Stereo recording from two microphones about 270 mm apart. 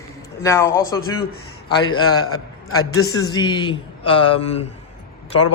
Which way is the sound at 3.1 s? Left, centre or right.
Centre.